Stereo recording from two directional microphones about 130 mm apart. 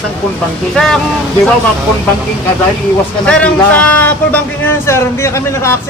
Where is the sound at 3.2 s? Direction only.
10° left (ahead or behind).